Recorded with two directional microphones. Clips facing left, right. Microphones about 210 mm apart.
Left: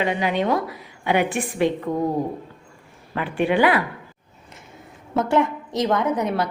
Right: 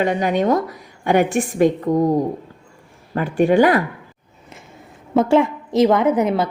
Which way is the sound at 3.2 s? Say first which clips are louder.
Right 5 dB; 45° right (ahead or behind).